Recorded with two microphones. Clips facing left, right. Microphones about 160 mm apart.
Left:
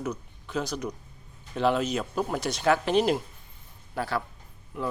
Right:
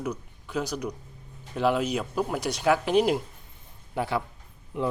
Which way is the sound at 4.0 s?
20° right (ahead or behind).